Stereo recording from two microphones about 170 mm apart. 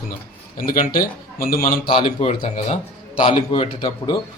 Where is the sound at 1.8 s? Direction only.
35° left (ahead or behind).